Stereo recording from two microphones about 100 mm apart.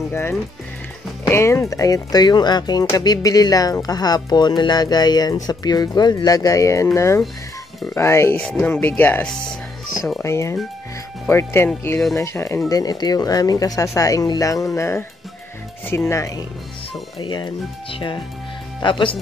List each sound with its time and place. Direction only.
0.1 s speech: 25° left (ahead or behind)
7.9 s speech: 25° left (ahead or behind)
8.4 s speech: 15° left (ahead or behind); by 12.5 s 30° left (ahead or behind)
12.6 s speech: 40° left (ahead or behind)
17.2 s speech: 45° left (ahead or behind)